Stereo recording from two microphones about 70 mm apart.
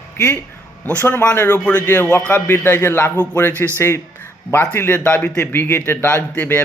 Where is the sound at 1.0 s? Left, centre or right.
Left.